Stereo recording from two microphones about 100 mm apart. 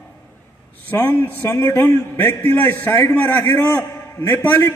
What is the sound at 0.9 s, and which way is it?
A man's voice, 20° left (ahead or behind).